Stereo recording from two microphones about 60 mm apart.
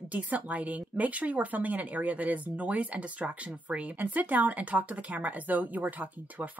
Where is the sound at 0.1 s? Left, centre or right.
Right.